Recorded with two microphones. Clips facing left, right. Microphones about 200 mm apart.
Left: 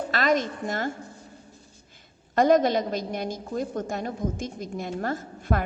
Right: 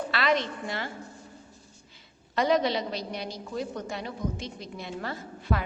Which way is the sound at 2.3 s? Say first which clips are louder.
Left 5 dB; 50° left (ahead or behind).